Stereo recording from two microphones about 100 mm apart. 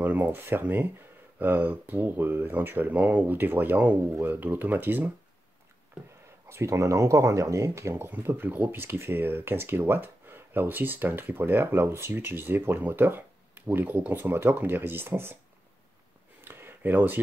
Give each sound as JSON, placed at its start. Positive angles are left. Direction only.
{"t": 0.0, "sound": "speech", "side_deg": -15}
{"t": 6.5, "sound": "speech", "side_deg": -30}
{"t": 16.3, "sound": "a sound", "side_deg": -20}